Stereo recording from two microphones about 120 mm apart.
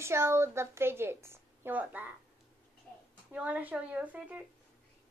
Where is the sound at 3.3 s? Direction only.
10° right (ahead or behind).